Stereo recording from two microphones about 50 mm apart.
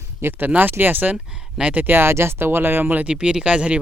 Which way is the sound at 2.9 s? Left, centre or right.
Right.